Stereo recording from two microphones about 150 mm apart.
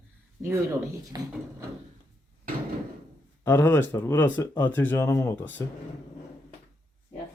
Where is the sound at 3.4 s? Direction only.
15° left (ahead or behind).